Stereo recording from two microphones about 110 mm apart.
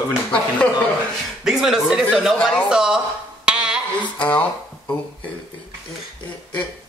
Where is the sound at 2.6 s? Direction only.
5° right (ahead or behind).